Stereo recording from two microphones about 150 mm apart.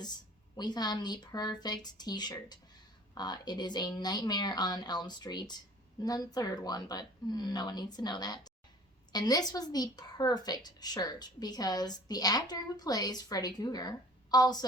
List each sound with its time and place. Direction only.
0.5 s a woman's voice: 30° left (ahead or behind)